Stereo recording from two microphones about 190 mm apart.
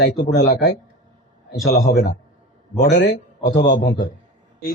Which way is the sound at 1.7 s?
45° left (ahead or behind).